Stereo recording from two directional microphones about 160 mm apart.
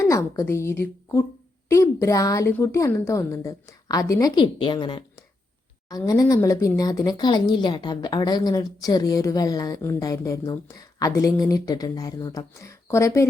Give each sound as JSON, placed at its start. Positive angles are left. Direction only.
{"t": 0.0, "sound": "speech", "side_deg": 20}